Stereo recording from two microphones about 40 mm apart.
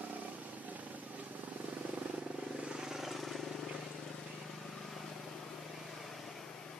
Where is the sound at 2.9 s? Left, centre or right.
Centre.